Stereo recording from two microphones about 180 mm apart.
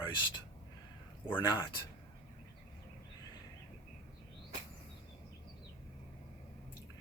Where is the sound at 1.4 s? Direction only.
20° left (ahead or behind).